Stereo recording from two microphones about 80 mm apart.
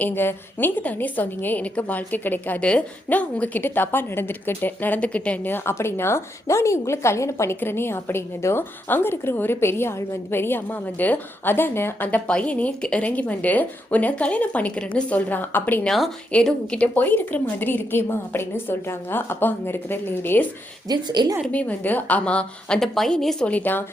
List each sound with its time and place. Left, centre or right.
0.0 s a woman's voice: left
7.5 s a woman's voice: left
20.8 s a woman's voice: right
21.5 s a woman's voice: centre
23.5 s a woman's voice: left